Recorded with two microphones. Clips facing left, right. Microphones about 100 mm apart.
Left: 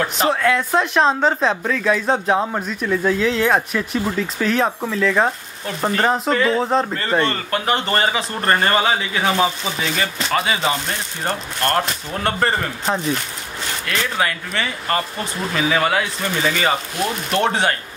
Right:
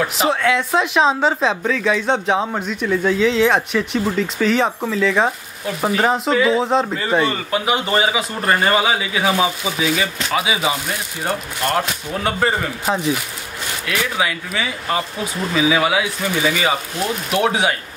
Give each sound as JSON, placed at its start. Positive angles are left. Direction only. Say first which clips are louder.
{"t": 0.0, "sound": "speech", "louder": "even", "side_deg": 0}